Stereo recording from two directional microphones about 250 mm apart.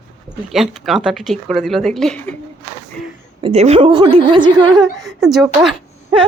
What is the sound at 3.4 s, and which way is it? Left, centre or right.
A woman's voice, right.